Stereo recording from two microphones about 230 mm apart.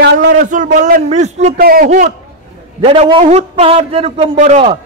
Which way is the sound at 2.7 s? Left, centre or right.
Right.